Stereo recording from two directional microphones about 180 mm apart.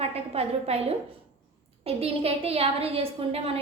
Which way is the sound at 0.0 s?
35° right (ahead or behind).